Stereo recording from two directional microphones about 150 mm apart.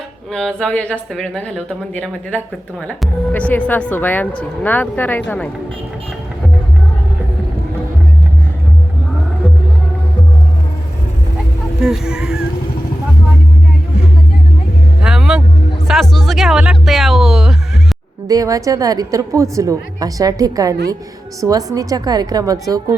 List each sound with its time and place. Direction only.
0.3 s speech: 5° left (ahead or behind)
11.8 s fowl: 5° right (ahead or behind)
15.0 s vehicle: 5° right (ahead or behind)
15.9 s speech: centre (ahead or behind)
18.3 s a woman's voice: 20° right (ahead or behind)